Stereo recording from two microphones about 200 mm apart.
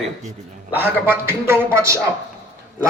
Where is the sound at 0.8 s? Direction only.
10° right (ahead or behind).